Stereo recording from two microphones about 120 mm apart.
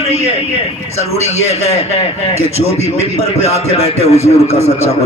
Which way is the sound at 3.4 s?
60° left (ahead or behind).